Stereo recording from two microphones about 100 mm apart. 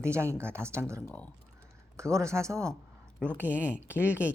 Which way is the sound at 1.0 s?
15° left (ahead or behind).